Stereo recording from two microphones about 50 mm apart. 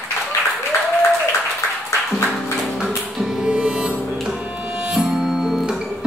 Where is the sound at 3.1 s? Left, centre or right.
Centre.